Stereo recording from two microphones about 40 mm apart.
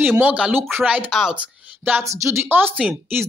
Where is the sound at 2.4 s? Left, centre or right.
Right.